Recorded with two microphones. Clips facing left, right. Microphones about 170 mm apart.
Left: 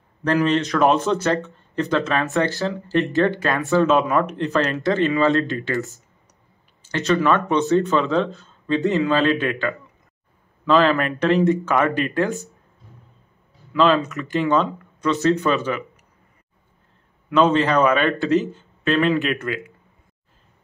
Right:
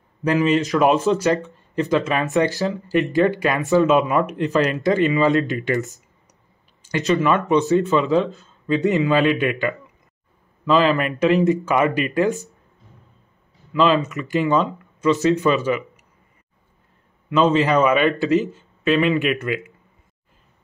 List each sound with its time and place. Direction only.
0.2 s speech: 5° right (ahead or behind)
2.6 s speech: centre (ahead or behind)
5.5 s speech: 15° right (ahead or behind)
7.1 s speech: centre (ahead or behind)
9.1 s speech: 10° right (ahead or behind)
10.6 s speech: 5° right (ahead or behind)
13.7 s speech: centre (ahead or behind)
17.3 s speech: 5° right (ahead or behind)